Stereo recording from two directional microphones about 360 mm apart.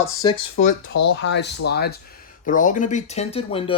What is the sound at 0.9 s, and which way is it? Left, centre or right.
Speech, left.